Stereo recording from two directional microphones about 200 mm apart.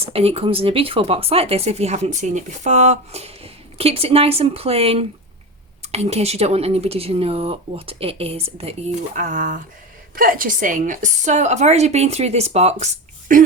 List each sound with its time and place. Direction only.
0.0 s a woman's voice: 30° right (ahead or behind)